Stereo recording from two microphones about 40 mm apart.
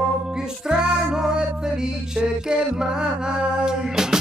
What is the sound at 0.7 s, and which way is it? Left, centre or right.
Music, centre.